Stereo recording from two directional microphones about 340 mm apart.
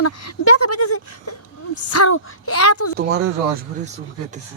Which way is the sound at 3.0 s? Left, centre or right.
Right.